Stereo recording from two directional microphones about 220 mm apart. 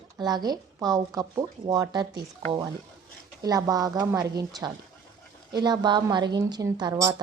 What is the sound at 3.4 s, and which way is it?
A woman's voice, 15° right (ahead or behind).